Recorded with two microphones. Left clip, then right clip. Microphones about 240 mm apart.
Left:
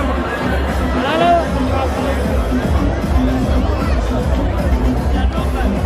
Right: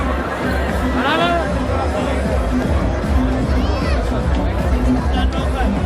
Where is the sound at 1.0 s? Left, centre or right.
Centre.